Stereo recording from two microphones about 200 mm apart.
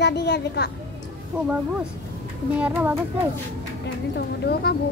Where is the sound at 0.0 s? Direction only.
55° left (ahead or behind).